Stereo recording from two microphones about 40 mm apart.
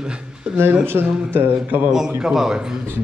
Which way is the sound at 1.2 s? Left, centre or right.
Right.